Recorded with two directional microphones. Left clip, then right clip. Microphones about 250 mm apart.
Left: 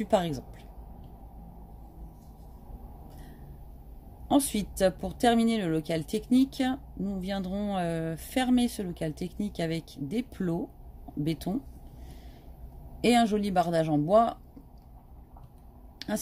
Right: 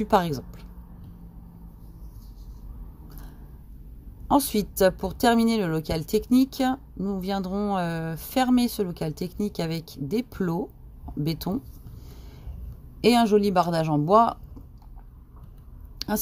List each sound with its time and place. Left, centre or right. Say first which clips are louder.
0.1 s speech: right 4 dB; right
4.3 s speech: right 4 dB; right
13.0 s speech: right 5 dB; right